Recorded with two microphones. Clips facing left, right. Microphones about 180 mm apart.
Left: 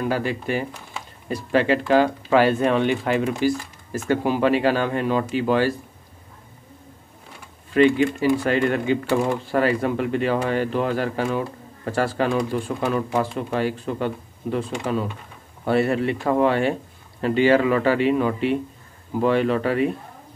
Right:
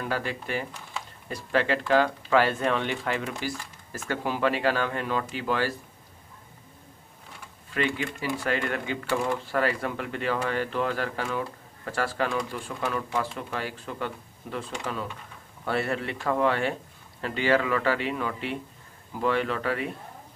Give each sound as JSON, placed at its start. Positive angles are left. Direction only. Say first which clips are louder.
{"t": 0.0, "sound": "speech", "louder": "left 7 dB", "side_deg": 15}
{"t": 7.7, "sound": "speech", "louder": "left 12 dB", "side_deg": 25}